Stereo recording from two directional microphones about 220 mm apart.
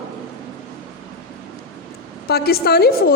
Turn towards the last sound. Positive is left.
turn(degrees=45)  # may be behind; listen again after turning